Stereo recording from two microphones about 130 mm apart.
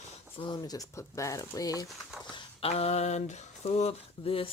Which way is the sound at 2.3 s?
45° left (ahead or behind).